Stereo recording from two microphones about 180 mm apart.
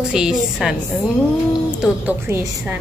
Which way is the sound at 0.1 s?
5° right (ahead or behind).